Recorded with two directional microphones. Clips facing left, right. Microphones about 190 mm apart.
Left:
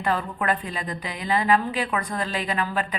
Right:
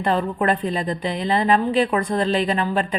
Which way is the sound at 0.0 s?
30° right (ahead or behind).